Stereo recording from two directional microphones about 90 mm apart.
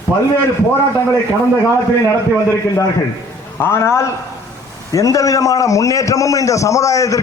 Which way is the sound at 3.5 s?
25° left (ahead or behind).